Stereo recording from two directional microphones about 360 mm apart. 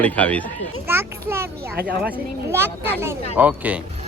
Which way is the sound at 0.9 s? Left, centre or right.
Centre.